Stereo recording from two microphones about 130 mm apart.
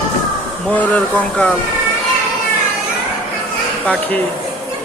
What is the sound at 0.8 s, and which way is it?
Speech, 10° left (ahead or behind).